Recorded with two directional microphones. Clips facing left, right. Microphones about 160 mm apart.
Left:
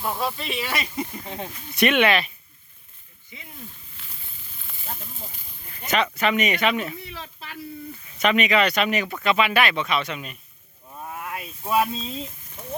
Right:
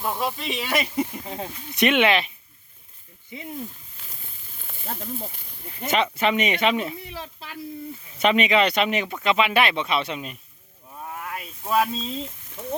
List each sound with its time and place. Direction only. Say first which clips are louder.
0.2 s speech: even; 15° right (ahead or behind)
3.9 s snake: right 1 dB; 45° right (ahead or behind)
5.8 s speech: right 1 dB; 25° right (ahead or behind)
8.2 s speech: right 1 dB; 25° right (ahead or behind)
10.9 s a sound: even; 5° left (ahead or behind)